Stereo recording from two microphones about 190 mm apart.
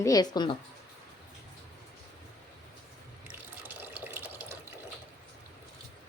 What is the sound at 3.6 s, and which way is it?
Water tap, 10° right (ahead or behind).